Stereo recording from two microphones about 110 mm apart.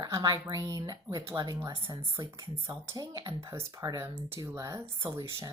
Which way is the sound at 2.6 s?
30° right (ahead or behind).